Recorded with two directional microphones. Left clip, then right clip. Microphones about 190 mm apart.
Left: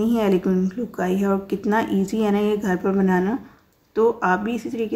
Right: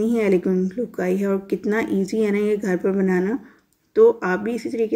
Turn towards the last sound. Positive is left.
turn(degrees=-10)  # may be behind; listen again after turning